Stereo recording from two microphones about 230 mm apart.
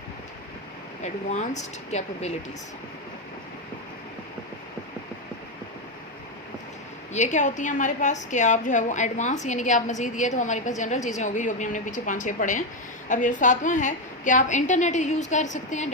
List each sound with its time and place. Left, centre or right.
1.0 s speech: left
7.1 s a woman's voice: left